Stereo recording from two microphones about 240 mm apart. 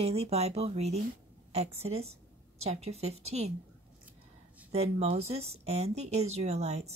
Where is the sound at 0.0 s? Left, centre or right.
Right.